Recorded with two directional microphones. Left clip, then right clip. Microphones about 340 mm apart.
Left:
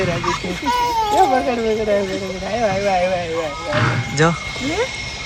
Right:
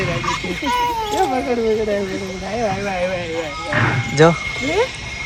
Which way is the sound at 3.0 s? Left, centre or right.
Left.